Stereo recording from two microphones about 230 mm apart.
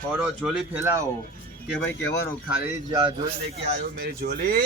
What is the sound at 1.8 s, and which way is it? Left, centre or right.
Speech, centre.